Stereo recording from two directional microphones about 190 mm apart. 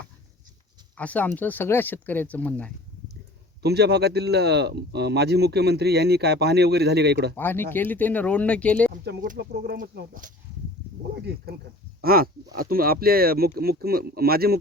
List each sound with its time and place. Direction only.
0.9 s speech: 5° left (ahead or behind)
3.6 s speech: 60° right (ahead or behind)
7.3 s speech: 10° left (ahead or behind)
9.2 s speech: 50° right (ahead or behind)
12.0 s speech: 50° right (ahead or behind)